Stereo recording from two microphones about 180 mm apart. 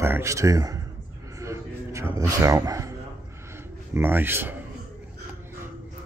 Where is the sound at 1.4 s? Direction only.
15° right (ahead or behind).